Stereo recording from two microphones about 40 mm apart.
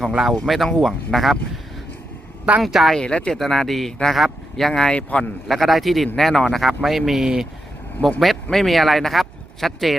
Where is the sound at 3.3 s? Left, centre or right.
Centre.